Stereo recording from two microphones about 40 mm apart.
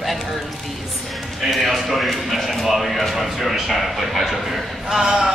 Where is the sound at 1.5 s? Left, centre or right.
Centre.